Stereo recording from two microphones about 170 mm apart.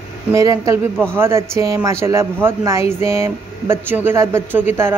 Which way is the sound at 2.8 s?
40° left (ahead or behind).